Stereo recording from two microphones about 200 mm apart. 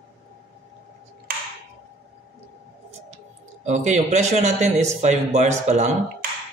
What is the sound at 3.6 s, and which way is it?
A man's voice, 35° right (ahead or behind).